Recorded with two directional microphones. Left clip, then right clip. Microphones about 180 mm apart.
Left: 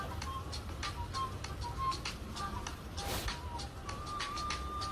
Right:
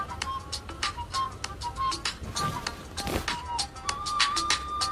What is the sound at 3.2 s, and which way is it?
Music, 50° right (ahead or behind).